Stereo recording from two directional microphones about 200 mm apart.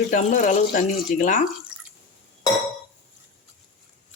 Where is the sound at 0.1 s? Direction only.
35° left (ahead or behind).